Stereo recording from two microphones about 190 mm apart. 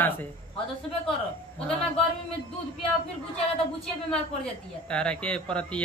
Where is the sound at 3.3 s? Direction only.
5° left (ahead or behind).